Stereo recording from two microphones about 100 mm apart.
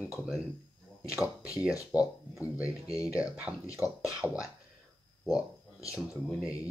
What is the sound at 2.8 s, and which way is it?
Speech, 35° left (ahead or behind).